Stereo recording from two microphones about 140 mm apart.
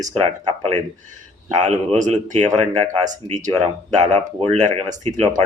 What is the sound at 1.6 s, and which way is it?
Speech, 60° right (ahead or behind).